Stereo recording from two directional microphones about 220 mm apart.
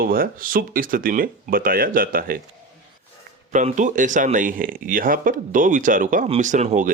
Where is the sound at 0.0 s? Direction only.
40° right (ahead or behind).